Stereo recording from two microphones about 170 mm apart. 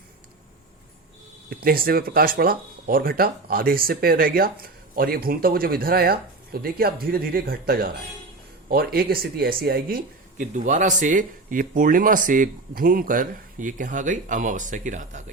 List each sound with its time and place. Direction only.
1.5 s speech: 60° right (ahead or behind)